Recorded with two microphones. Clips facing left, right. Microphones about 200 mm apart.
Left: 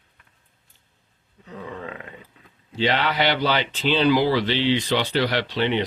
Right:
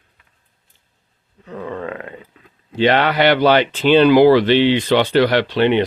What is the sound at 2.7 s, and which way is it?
Speech, 60° right (ahead or behind).